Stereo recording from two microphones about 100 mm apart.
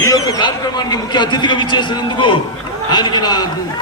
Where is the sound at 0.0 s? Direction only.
40° left (ahead or behind).